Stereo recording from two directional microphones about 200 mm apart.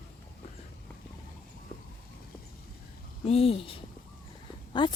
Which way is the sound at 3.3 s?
30° left (ahead or behind).